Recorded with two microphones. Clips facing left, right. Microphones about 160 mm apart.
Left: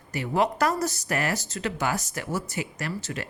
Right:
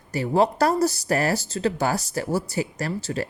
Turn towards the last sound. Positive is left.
turn(degrees=-35)  # may be behind; listen again after turning